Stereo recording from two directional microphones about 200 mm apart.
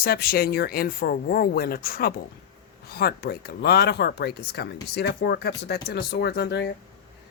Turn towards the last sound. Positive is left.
turn(degrees=55)  # may be behind; listen again after turning